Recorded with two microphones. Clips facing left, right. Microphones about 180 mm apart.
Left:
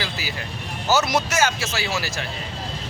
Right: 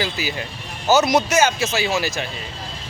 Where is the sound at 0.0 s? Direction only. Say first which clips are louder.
Right 5 dB; 20° right (ahead or behind).